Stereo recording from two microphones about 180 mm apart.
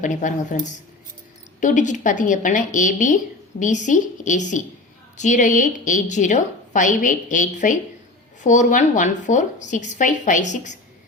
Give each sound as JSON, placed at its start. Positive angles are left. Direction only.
{"t": 0.0, "sound": "a woman's voice", "side_deg": 45}